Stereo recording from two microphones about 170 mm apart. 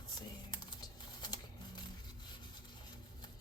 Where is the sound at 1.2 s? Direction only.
25° left (ahead or behind).